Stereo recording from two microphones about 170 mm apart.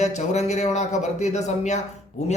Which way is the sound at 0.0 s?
40° left (ahead or behind).